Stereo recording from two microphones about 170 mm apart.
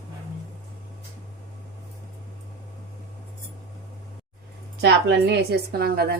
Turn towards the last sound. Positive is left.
turn(degrees=-65)  # may be behind; listen again after turning